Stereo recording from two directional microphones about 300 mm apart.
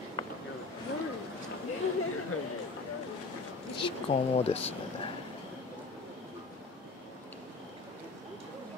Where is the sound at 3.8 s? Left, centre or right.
Centre.